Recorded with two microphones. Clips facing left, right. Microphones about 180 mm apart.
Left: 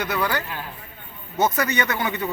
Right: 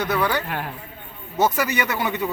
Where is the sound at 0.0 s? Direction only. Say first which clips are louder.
Right 2 dB; 10° left (ahead or behind).